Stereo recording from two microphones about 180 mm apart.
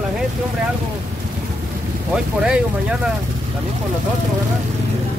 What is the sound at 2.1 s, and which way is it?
Speech, 5° right (ahead or behind).